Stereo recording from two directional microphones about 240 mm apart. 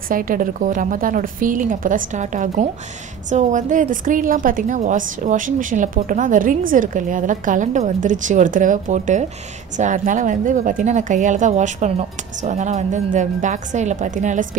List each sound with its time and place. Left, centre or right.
0.1 s a woman's voice: right